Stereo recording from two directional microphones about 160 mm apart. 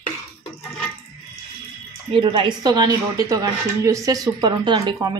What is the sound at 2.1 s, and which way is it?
A woman's voice, 30° right (ahead or behind).